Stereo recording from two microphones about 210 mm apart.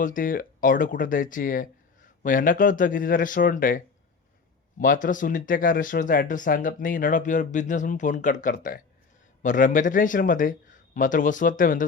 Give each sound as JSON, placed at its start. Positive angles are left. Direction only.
{"t": 0.0, "sound": "speech", "side_deg": 40}